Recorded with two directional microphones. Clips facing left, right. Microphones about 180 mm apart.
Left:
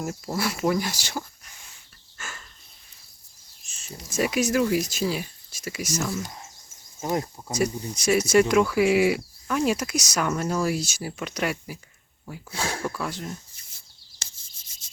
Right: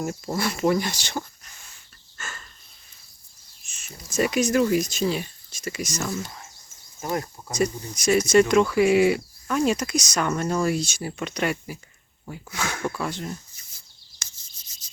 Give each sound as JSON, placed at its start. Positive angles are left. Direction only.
{"t": 0.0, "sound": "speech", "side_deg": 0}
{"t": 2.1, "sound": "a sound", "side_deg": 10}
{"t": 3.7, "sound": "a sound", "side_deg": 30}
{"t": 4.1, "sound": "speech", "side_deg": 5}
{"t": 7.0, "sound": "speech", "side_deg": 20}
{"t": 8.0, "sound": "speech", "side_deg": 10}
{"t": 12.5, "sound": "speech", "side_deg": 30}
{"t": 12.9, "sound": "speech", "side_deg": 0}
{"t": 14.2, "sound": "rub", "side_deg": 30}